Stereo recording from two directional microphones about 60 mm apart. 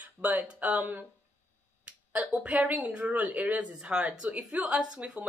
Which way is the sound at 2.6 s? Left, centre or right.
Right.